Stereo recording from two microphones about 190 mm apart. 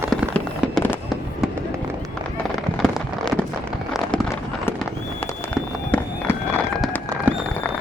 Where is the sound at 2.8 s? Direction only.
5° left (ahead or behind).